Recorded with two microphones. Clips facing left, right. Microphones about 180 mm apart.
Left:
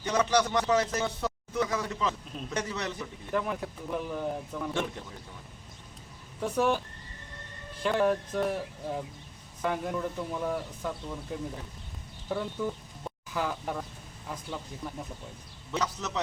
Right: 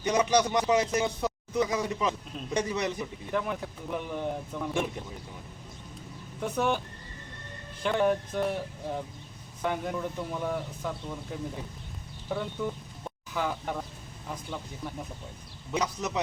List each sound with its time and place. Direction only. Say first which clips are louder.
0.0 s speech: right 2 dB; 15° right (ahead or behind)
3.3 s a man's voice: even; centre (ahead or behind)
6.4 s a man's voice: left 1 dB; centre (ahead or behind)
15.7 s speech: right 2 dB; 15° right (ahead or behind)